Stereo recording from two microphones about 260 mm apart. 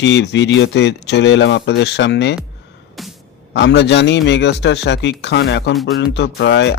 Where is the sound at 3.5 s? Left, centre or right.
Left.